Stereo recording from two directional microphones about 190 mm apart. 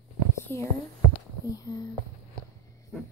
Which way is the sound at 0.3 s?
15° left (ahead or behind).